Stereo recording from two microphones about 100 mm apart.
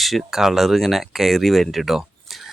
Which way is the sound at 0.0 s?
Centre (ahead or behind).